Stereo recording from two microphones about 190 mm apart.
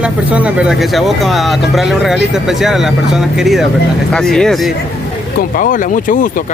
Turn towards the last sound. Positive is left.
turn(degrees=45)  # may be behind; listen again after turning